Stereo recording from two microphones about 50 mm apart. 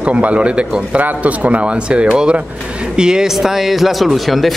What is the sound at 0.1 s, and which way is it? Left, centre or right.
A man's voice, right.